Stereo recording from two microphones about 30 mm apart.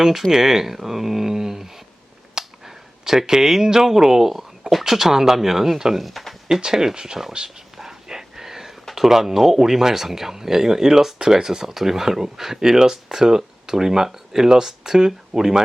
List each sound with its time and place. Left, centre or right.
0.3 s speech: centre
2.4 s a sound: right
3.0 s speech: centre
6.6 s speech: centre
7.8 s a sound: centre
9.0 s speech: centre